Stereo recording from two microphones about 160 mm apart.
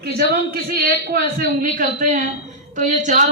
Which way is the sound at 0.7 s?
75° right (ahead or behind).